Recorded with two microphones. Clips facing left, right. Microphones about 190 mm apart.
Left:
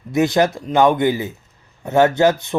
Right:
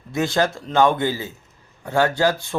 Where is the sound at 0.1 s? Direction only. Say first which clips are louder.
Left 5 dB; 20° left (ahead or behind).